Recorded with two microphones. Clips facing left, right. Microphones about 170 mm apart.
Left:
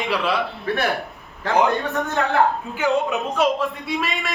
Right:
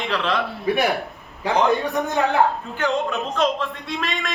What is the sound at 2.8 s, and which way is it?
A man's voice, 10° left (ahead or behind).